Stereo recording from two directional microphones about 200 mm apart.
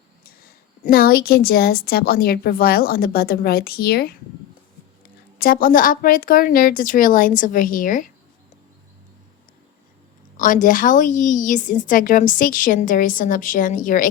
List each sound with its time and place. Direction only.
0.3 s a woman's voice: 50° left (ahead or behind)
5.4 s a woman's voice: 45° left (ahead or behind)
10.3 s a woman's voice: 40° left (ahead or behind)